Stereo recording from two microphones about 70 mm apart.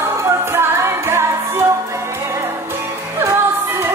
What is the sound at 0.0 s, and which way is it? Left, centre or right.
Music, right.